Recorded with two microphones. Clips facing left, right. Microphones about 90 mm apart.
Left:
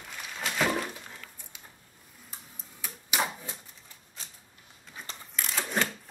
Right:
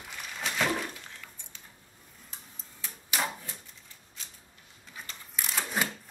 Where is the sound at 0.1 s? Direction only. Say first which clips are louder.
Left 1 dB; centre (ahead or behind).